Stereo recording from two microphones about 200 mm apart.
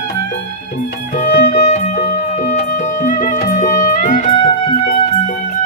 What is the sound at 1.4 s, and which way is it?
Music, 35° left (ahead or behind).